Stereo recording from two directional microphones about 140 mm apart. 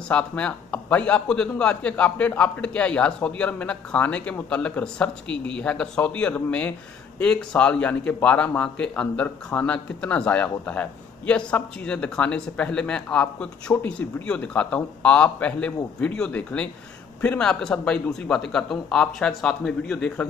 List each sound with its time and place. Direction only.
0.1 s a man's voice: 10° left (ahead or behind)